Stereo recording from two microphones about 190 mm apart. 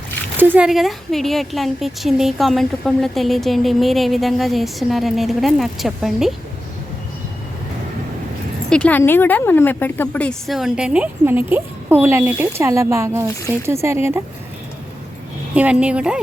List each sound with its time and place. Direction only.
0.3 s a woman's voice: 10° right (ahead or behind)
8.7 s a woman's voice: 10° left (ahead or behind); by 14.2 s 15° right (ahead or behind)
15.5 s a woman's voice: 5° right (ahead or behind)